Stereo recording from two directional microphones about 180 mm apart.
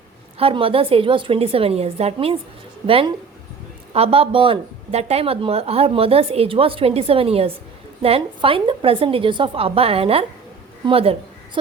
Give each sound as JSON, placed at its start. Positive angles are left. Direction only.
{"t": 0.3, "sound": "a woman's voice", "side_deg": -30}